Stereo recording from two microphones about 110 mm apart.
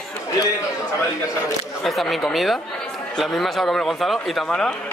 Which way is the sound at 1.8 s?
Centre (ahead or behind).